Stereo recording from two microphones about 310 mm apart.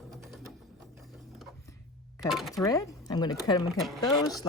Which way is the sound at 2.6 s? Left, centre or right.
Centre.